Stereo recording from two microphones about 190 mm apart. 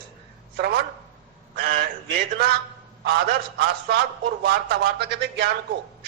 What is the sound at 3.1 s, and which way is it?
Speech, 55° right (ahead or behind).